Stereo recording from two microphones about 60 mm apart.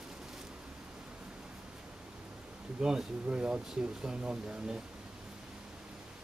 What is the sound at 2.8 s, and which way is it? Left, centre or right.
Speech, centre.